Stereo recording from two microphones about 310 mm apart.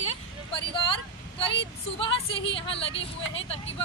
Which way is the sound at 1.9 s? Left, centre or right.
Centre.